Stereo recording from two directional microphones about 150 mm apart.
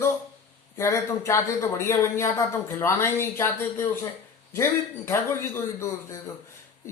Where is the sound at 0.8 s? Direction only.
20° left (ahead or behind).